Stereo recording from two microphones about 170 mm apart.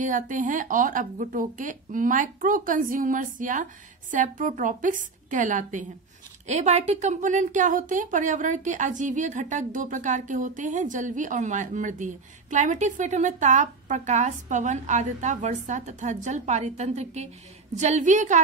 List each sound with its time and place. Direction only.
0.0 s a woman's voice: 50° right (ahead or behind)